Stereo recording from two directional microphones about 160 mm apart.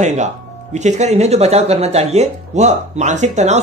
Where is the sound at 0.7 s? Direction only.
45° right (ahead or behind).